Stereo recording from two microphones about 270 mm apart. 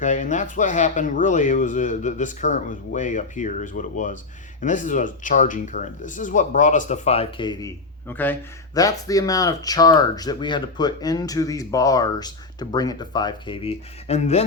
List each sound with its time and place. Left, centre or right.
0.0 s speech: left